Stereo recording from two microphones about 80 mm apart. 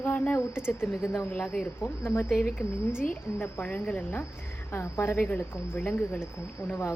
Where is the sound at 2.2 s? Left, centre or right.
Centre.